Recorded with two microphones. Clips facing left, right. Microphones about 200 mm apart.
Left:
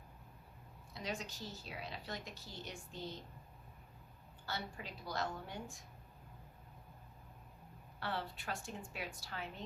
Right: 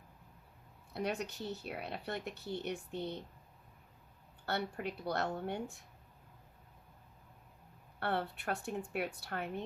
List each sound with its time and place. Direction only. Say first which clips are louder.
0.9 s speech: right 7 dB; 65° right (ahead or behind)
4.4 s speech: right 8 dB; 60° right (ahead or behind)
7.9 s speech: right 6 dB; 60° right (ahead or behind)